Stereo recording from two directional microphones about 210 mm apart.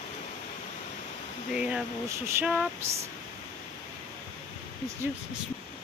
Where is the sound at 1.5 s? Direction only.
5° right (ahead or behind).